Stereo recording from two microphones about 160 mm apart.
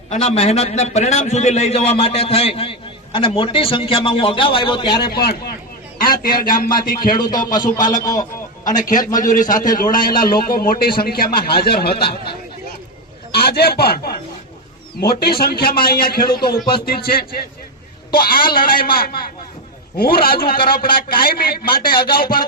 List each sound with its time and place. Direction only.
0.1 s a man's voice: 40° left (ahead or behind)
5.1 s a man's voice: 70° left (ahead or behind)
7.9 s a man's voice: 25° left (ahead or behind)
8.8 s a man's voice: 55° left (ahead or behind); by 12.1 s 75° left (ahead or behind)
13.3 s a man's voice: 80° left